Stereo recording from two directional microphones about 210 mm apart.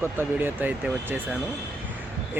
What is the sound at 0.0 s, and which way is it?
A man's voice, 10° right (ahead or behind).